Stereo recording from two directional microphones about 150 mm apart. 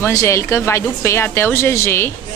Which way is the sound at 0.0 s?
20° left (ahead or behind).